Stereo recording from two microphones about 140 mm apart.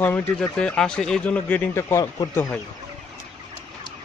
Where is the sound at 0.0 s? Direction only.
10° left (ahead or behind).